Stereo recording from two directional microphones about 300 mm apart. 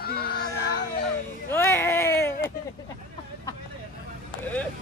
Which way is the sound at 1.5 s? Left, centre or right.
Centre.